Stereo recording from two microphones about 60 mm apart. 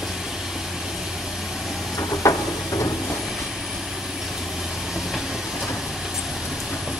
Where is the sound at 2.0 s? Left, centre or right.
Left.